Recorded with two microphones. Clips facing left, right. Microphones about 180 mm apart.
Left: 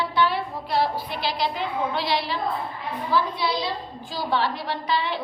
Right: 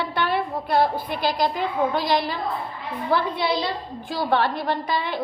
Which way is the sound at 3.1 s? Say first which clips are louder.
Right 2 dB; 55° right (ahead or behind).